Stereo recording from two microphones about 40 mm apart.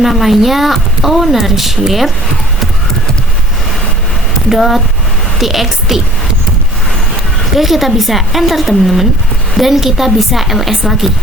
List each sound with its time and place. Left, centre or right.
0.0 s speech: centre
4.4 s a woman's voice: centre
7.5 s speech: centre